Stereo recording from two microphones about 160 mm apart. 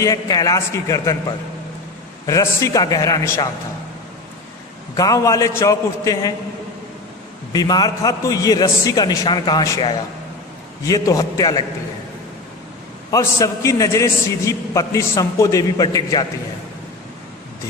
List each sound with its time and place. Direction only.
0.0 s a man's voice: 20° left (ahead or behind)
2.2 s a man's voice: 20° left (ahead or behind)
4.9 s a man's voice: 20° left (ahead or behind)
7.5 s a man's voice: 25° left (ahead or behind)
13.1 s a man's voice: 20° left (ahead or behind)